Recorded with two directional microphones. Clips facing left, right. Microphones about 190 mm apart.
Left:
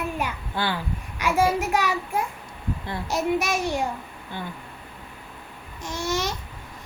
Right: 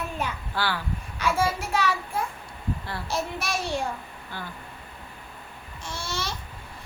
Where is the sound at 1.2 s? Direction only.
15° left (ahead or behind).